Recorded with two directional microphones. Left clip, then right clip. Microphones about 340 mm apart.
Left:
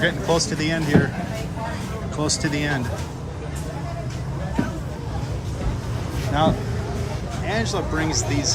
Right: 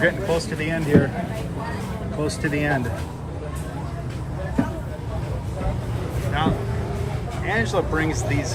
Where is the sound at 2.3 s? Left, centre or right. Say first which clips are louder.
Right 1 dB; centre.